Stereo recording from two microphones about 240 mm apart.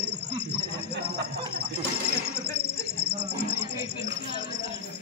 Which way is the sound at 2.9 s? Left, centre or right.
Right.